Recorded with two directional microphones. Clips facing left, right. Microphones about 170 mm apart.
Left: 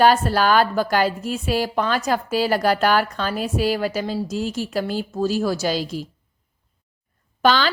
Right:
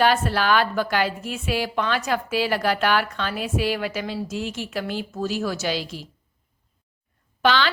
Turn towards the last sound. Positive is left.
turn(degrees=40)  # may be behind; listen again after turning